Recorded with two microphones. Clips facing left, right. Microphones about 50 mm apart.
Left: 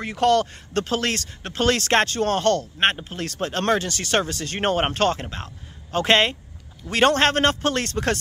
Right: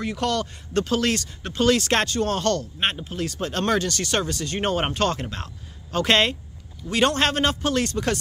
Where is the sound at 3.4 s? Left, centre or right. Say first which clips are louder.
Left 2 dB; left.